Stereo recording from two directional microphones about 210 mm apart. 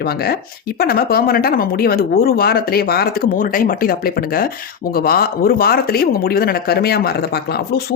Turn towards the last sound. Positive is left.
turn(degrees=50)  # may be behind; listen again after turning